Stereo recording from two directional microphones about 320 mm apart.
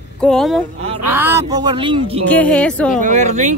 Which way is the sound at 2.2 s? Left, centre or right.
Centre.